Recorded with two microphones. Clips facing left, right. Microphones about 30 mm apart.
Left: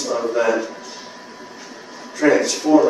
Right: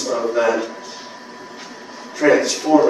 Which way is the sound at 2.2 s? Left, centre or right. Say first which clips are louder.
Right 1 dB; centre.